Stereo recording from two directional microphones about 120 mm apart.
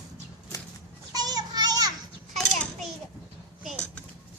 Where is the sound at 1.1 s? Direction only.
35° right (ahead or behind).